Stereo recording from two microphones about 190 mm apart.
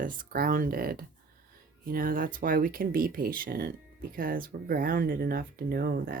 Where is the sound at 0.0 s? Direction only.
50° right (ahead or behind).